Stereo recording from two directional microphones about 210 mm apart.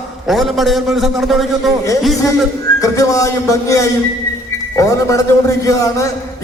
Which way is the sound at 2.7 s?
15° left (ahead or behind).